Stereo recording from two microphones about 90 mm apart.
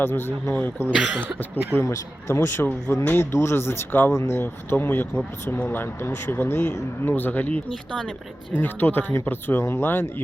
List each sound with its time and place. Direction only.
0.0 s speech: 25° left (ahead or behind)
0.9 s speech: 5° right (ahead or behind)
1.8 s speech: 30° left (ahead or behind)